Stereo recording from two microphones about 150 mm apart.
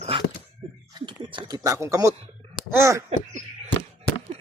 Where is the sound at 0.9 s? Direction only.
30° right (ahead or behind).